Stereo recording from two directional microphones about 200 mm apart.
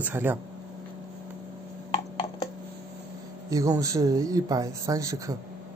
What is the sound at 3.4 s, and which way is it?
A man's voice, 15° right (ahead or behind).